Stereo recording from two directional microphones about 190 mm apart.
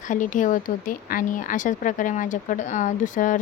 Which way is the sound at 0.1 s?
40° left (ahead or behind).